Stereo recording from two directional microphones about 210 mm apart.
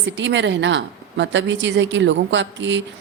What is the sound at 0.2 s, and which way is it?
Speech, 60° right (ahead or behind).